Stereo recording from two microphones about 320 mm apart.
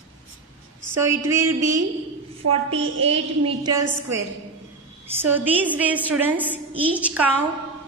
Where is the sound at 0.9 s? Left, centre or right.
Centre.